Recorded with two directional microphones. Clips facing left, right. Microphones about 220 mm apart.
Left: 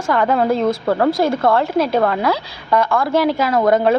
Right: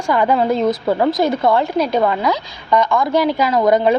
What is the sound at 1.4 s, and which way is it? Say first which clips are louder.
A woman's voice: even; centre (ahead or behind).